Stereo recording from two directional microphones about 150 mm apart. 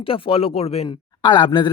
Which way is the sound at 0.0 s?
40° left (ahead or behind).